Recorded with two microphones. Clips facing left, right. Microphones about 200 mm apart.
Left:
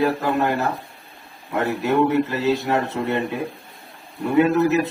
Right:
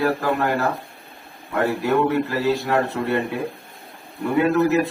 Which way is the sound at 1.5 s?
20° left (ahead or behind).